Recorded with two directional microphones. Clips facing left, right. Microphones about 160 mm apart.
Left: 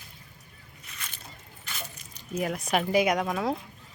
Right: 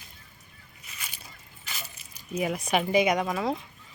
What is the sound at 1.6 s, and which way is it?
Speech, 10° right (ahead or behind).